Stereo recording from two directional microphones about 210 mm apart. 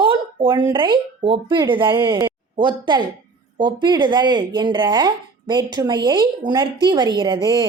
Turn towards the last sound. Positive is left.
turn(degrees=-25)  # may be behind; listen again after turning